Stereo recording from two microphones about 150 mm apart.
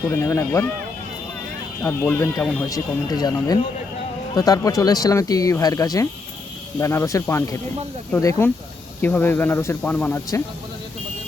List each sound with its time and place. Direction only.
0.1 s speech: 20° left (ahead or behind)
1.8 s speech: 15° left (ahead or behind)